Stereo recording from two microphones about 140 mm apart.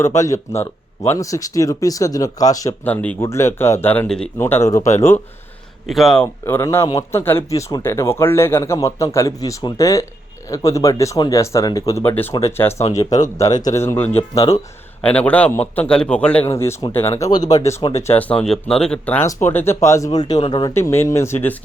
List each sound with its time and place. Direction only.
0.0 s speech: 20° left (ahead or behind)
2.8 s speech: 10° left (ahead or behind)
5.9 s speech: centre (ahead or behind)
6.2 s speech: 15° left (ahead or behind)
15.0 s speech: 10° left (ahead or behind)
16.5 s speech: 20° left (ahead or behind)
18.4 s speech: 5° left (ahead or behind)
19.2 s speech: 20° left (ahead or behind)
20.7 s speech: 20° left (ahead or behind)